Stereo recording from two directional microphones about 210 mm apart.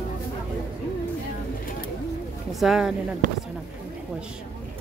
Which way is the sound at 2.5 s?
Centre (ahead or behind).